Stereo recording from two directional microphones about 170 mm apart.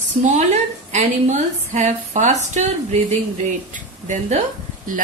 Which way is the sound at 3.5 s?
50° right (ahead or behind).